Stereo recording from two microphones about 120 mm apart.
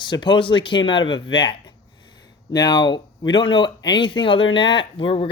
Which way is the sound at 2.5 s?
35° left (ahead or behind).